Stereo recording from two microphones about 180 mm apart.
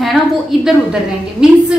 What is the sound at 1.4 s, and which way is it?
Speech, 5° right (ahead or behind).